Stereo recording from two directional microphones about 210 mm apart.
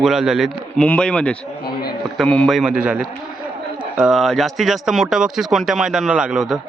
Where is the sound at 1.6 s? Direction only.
45° left (ahead or behind).